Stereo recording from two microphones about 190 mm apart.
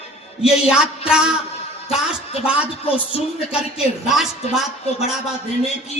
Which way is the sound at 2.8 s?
30° left (ahead or behind).